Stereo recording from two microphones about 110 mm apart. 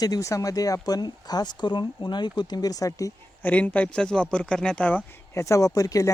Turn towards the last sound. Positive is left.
turn(degrees=30)  # may be behind; listen again after turning